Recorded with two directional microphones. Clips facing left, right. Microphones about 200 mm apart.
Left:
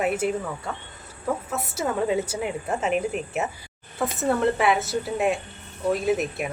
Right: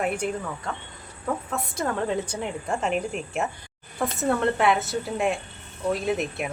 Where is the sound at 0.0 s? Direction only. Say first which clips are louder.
Left 3 dB; 5° left (ahead or behind).